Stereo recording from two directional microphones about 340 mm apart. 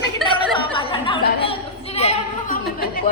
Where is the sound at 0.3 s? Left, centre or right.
Centre.